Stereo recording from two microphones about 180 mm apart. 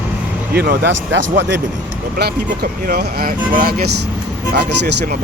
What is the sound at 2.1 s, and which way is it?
Speech, 55° right (ahead or behind).